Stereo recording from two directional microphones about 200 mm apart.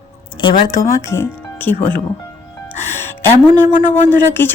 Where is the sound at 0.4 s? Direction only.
15° left (ahead or behind).